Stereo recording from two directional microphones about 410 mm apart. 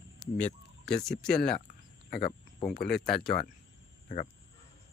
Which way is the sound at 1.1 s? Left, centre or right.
Centre.